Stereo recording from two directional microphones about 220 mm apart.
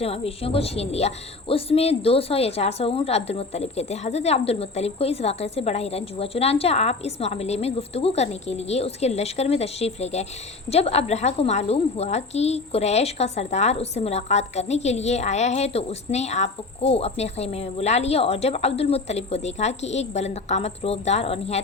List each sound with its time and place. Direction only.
0.0 s a woman's voice: 25° left (ahead or behind)